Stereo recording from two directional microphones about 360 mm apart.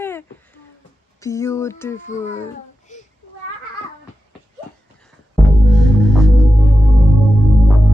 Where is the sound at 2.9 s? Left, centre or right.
Centre.